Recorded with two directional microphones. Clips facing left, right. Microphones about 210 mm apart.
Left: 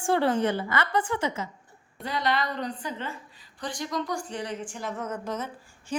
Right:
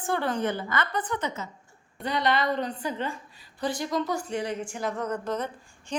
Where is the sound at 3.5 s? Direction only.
5° right (ahead or behind).